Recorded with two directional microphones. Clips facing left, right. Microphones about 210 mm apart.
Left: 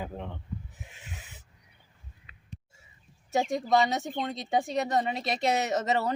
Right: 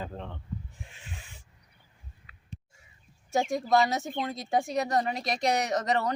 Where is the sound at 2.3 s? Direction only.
20° left (ahead or behind).